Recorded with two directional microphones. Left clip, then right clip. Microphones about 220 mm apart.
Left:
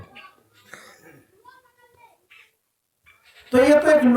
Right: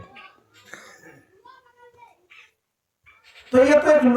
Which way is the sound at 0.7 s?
15° right (ahead or behind).